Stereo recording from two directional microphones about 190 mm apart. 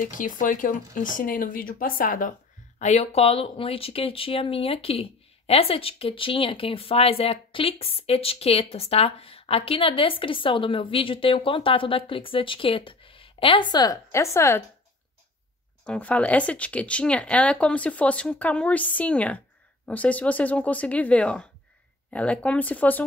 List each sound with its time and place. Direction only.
0.0 s speech: 45° left (ahead or behind); by 14.6 s 15° left (ahead or behind)
15.8 s speech: 5° left (ahead or behind)